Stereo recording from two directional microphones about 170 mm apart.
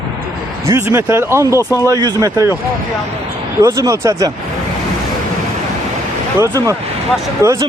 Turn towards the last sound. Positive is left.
turn(degrees=-15)  # may be behind; listen again after turning